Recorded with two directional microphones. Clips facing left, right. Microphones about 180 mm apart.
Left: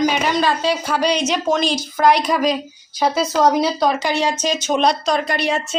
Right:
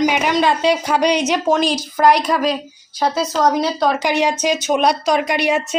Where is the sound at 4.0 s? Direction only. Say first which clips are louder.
Right 2 dB; 15° right (ahead or behind).